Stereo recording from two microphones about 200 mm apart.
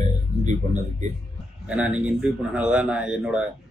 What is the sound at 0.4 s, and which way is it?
Speech, 35° right (ahead or behind).